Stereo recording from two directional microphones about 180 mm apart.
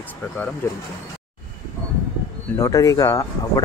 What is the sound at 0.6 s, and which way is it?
Speech, 10° left (ahead or behind).